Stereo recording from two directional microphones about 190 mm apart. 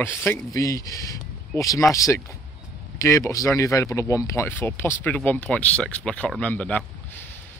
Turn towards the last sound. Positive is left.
turn(degrees=5)  # may be behind; listen again after turning